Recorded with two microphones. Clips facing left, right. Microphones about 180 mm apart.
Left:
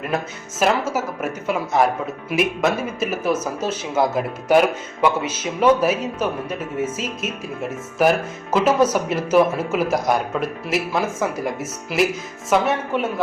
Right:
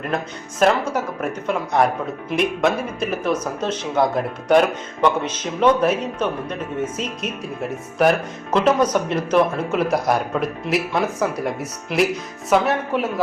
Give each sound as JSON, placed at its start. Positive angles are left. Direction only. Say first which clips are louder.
{"t": 0.6, "sound": "speech", "louder": "right 2 dB", "side_deg": 5}